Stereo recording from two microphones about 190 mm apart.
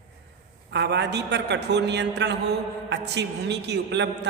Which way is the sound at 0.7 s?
65° right (ahead or behind).